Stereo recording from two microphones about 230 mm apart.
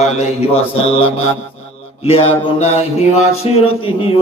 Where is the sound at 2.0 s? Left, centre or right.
Left.